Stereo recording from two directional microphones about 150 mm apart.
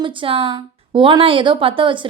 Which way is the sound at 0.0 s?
35° right (ahead or behind).